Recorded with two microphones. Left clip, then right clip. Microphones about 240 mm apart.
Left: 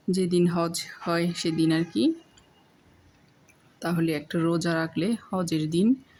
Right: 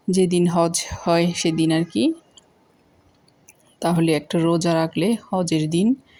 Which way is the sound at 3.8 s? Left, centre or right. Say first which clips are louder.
Right 8 dB; centre.